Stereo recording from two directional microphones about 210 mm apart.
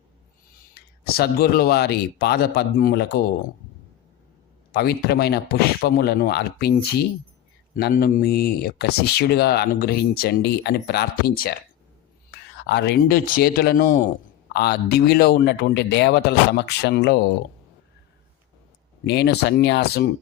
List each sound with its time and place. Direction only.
0.7 s speech: 45° left (ahead or behind)
4.7 s speech: 50° left (ahead or behind)
19.0 s speech: 55° left (ahead or behind)